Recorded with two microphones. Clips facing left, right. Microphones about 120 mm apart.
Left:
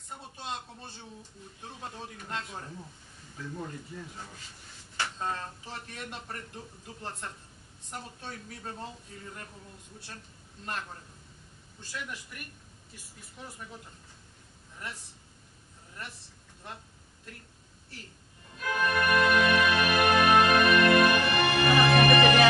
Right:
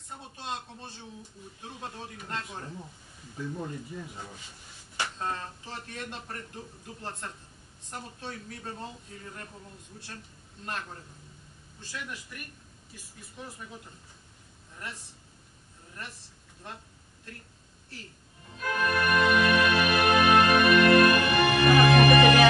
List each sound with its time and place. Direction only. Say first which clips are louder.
0.1 s a sound: right 1 dB; centre (ahead or behind)
1.6 s speech: right 1 dB; centre (ahead or behind)
3.3 s speech: right 3 dB; 10° right (ahead or behind)
5.2 s speech: even; centre (ahead or behind)
10.6 s speech: even; centre (ahead or behind)
18.6 s music: even; centre (ahead or behind)